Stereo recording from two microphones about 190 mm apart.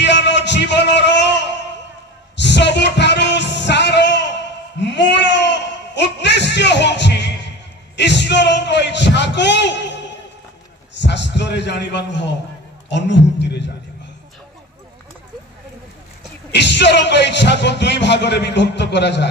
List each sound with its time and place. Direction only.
0.0 s a sound: 65° left (ahead or behind)
2.3 s music: 65° left (ahead or behind)
11.0 s speech: 65° left (ahead or behind)
16.5 s speech: 65° left (ahead or behind)